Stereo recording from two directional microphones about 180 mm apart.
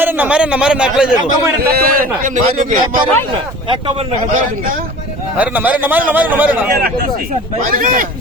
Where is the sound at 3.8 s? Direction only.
35° right (ahead or behind).